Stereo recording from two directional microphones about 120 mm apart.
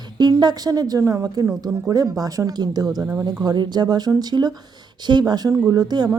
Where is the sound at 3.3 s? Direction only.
35° right (ahead or behind).